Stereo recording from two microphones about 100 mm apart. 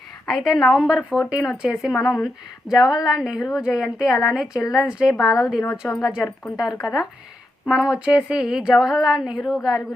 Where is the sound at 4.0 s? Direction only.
40° left (ahead or behind).